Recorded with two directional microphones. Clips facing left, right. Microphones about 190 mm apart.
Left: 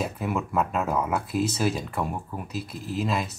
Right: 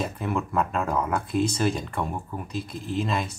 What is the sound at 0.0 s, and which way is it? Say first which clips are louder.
Speech: even; 5° left (ahead or behind).